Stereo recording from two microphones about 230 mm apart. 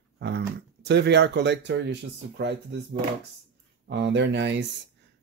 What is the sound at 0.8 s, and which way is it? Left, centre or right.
Speech, right.